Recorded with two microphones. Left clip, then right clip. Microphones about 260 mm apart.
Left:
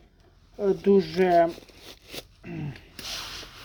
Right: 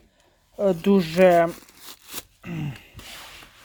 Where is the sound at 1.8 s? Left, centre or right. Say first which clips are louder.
Right 2 dB; right.